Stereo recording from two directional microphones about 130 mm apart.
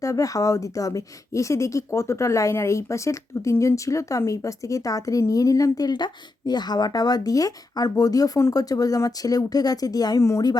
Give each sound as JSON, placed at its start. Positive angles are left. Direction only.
{"t": 0.0, "sound": "a woman's voice", "side_deg": 25}